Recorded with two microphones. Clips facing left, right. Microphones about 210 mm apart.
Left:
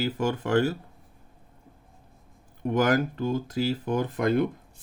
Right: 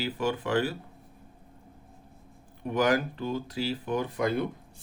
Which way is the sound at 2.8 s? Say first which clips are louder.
Left 2 dB; 45° left (ahead or behind).